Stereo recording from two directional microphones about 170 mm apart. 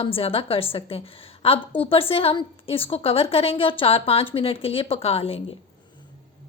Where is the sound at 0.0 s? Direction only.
35° left (ahead or behind).